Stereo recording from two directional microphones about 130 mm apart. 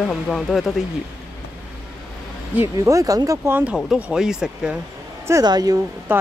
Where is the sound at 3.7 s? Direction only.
5° right (ahead or behind).